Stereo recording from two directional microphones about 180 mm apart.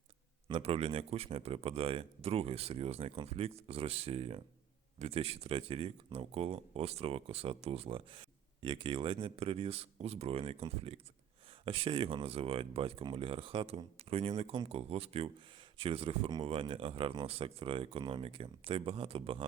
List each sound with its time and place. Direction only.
0.4 s speech: 30° right (ahead or behind)